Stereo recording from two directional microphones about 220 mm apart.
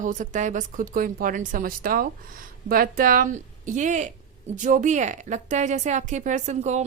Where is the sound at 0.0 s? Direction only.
35° right (ahead or behind).